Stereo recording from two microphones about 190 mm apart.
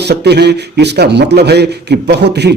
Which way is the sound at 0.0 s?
60° right (ahead or behind).